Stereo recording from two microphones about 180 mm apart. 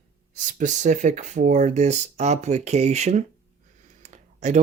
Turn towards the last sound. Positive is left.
turn(degrees=-40)  # may be behind; listen again after turning